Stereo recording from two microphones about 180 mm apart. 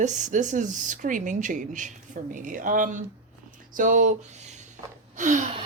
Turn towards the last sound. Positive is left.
turn(degrees=-40)  # may be behind; listen again after turning